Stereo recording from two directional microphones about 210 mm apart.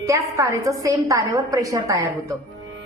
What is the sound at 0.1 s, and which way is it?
A woman's voice, 15° right (ahead or behind).